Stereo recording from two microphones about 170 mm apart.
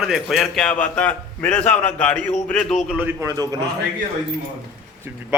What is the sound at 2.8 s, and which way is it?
Speech, 10° right (ahead or behind).